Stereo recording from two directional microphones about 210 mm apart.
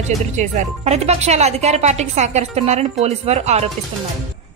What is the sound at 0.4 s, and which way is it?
Speech, 35° right (ahead or behind).